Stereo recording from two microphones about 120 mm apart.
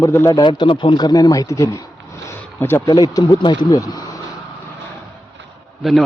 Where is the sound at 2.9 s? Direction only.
30° left (ahead or behind).